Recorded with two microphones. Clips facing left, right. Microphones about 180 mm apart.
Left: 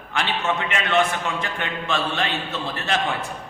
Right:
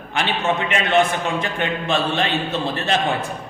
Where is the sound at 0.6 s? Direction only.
20° right (ahead or behind).